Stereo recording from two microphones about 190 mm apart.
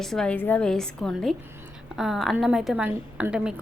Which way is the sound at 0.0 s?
5° left (ahead or behind).